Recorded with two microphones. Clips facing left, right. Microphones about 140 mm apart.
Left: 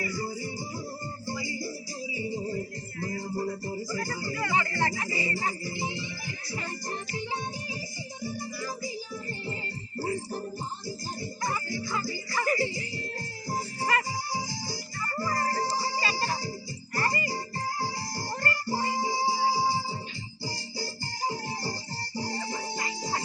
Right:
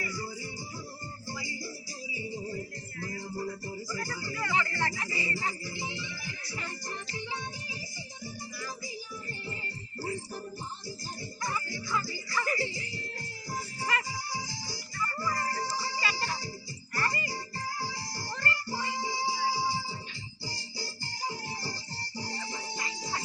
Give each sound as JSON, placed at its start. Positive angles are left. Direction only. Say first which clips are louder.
{"t": 0.0, "sound": "music", "louder": "left 5 dB", "side_deg": 35}
{"t": 2.1, "sound": "music", "louder": "left 5 dB", "side_deg": 30}
{"t": 10.0, "sound": "music", "louder": "left 5 dB", "side_deg": 40}
{"t": 11.4, "sound": "music", "louder": "left 3 dB", "side_deg": 35}